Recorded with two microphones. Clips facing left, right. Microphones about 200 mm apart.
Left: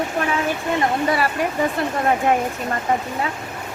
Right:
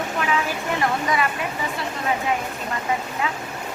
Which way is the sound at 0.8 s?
35° left (ahead or behind).